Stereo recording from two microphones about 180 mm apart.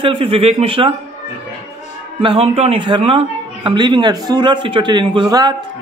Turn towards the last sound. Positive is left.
turn(degrees=-25)  # may be behind; listen again after turning